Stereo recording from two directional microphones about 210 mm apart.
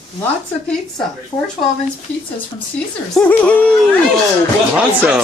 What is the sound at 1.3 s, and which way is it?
Speech, 20° left (ahead or behind).